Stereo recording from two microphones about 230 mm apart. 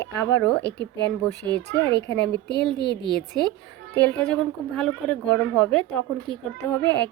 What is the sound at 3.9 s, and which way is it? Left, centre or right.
A woman's voice, centre.